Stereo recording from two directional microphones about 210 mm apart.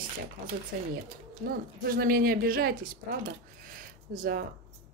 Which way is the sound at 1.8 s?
45° right (ahead or behind).